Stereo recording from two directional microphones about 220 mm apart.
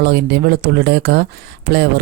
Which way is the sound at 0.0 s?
50° right (ahead or behind).